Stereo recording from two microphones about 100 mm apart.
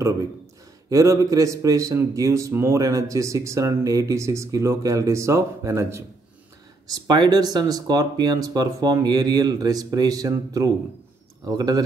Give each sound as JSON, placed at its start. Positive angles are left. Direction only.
{"t": 0.8, "sound": "speech", "side_deg": -30}
{"t": 6.9, "sound": "speech", "side_deg": -45}